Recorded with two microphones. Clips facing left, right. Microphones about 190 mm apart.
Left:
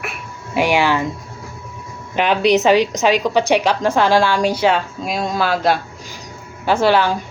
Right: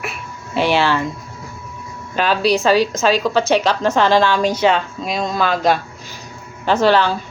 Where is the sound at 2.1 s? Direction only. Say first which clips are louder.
Left 2 dB; 20° left (ahead or behind).